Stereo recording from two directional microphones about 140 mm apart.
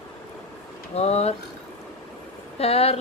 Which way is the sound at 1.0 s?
50° left (ahead or behind).